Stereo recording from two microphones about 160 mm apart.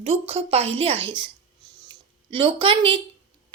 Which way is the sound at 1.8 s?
30° right (ahead or behind).